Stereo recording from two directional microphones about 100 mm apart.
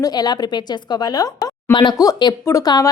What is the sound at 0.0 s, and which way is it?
A woman's voice, 40° left (ahead or behind).